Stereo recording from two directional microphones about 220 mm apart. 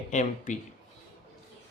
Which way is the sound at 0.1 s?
35° left (ahead or behind).